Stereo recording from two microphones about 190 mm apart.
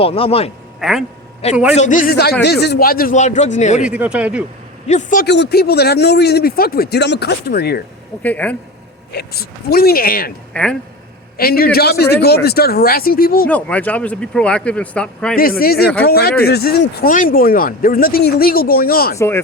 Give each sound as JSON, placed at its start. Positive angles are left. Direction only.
{"t": 0.0, "sound": "speech", "side_deg": 30}
{"t": 0.8, "sound": "speech", "side_deg": 0}
{"t": 1.7, "sound": "speech", "side_deg": 40}
{"t": 3.8, "sound": "speech", "side_deg": -5}
{"t": 4.9, "sound": "speech", "side_deg": 40}
{"t": 5.2, "sound": "speech", "side_deg": 65}
{"t": 8.2, "sound": "speech", "side_deg": 10}
{"t": 9.1, "sound": "speech", "side_deg": 55}
{"t": 10.5, "sound": "speech", "side_deg": 5}
{"t": 11.3, "sound": "speech", "side_deg": 50}
{"t": 13.5, "sound": "speech", "side_deg": 10}
{"t": 15.4, "sound": "speech", "side_deg": 50}